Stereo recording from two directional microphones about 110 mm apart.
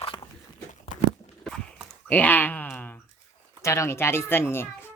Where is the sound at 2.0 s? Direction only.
15° left (ahead or behind).